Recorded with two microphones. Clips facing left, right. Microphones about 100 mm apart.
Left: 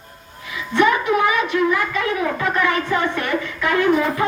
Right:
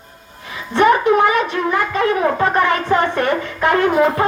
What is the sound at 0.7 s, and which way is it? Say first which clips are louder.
A child's voice: right 4 dB; 40° right (ahead or behind).